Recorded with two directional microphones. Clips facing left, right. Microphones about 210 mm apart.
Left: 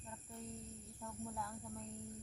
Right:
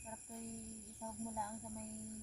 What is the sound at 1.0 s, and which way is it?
Speech, 10° right (ahead or behind).